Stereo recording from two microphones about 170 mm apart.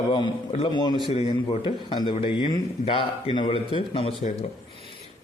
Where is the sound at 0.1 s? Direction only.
30° left (ahead or behind).